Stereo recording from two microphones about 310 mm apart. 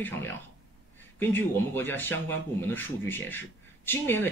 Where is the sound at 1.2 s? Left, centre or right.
Centre.